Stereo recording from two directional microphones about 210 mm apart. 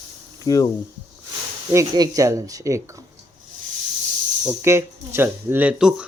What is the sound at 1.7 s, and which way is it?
Speech, 15° right (ahead or behind).